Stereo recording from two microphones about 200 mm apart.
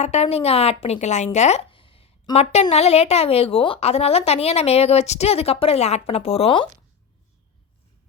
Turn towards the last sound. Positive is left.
turn(degrees=25)  # may be behind; listen again after turning